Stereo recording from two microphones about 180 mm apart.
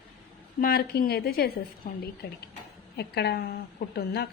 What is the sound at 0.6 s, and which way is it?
A woman's voice, 60° left (ahead or behind).